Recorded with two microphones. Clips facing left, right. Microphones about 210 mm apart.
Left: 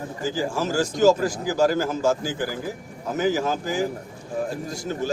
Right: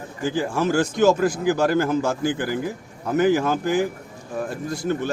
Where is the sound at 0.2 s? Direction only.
60° right (ahead or behind).